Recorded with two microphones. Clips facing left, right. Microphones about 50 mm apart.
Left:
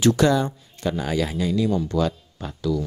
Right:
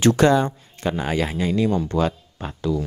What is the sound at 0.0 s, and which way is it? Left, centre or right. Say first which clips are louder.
Speech: right 2 dB; right.